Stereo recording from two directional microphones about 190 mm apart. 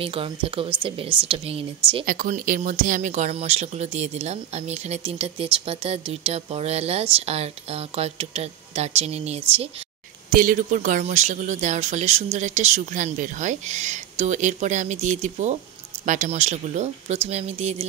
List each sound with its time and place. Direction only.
0.0 s speech: 30° right (ahead or behind)
2.0 s speech: 45° right (ahead or behind)
10.3 s speech: 45° right (ahead or behind)